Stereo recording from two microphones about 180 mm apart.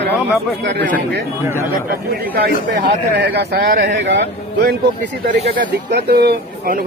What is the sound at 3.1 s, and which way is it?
Speech, 65° right (ahead or behind).